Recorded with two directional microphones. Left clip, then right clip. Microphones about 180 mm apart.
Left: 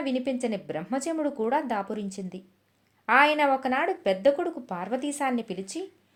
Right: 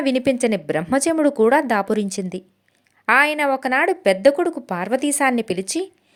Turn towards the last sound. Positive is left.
turn(degrees=-45)  # may be behind; listen again after turning